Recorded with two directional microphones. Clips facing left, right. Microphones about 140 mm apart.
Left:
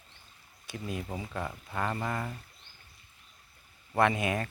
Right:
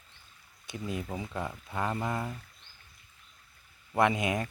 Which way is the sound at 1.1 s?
15° right (ahead or behind).